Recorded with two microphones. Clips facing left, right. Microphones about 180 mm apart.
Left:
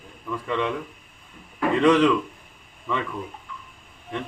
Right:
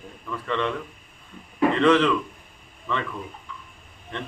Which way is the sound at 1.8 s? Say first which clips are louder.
Left 2 dB; 10° left (ahead or behind).